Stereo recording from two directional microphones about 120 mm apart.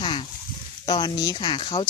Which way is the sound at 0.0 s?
45° left (ahead or behind).